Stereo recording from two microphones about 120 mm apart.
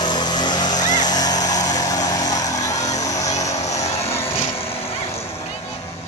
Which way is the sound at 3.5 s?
70° left (ahead or behind).